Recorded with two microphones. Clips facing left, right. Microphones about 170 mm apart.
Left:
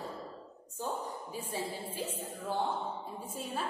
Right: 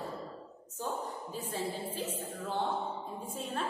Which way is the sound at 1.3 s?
10° left (ahead or behind).